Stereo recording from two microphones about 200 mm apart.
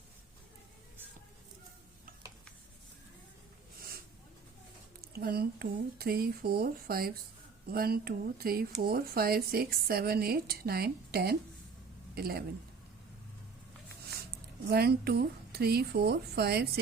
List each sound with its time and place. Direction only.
5.1 s speech: 50° right (ahead or behind)
14.7 s speech: 55° right (ahead or behind)